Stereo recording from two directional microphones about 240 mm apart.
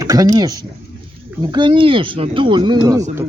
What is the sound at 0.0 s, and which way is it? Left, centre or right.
A man's voice, centre.